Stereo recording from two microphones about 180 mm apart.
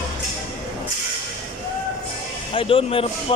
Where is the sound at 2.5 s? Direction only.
30° left (ahead or behind).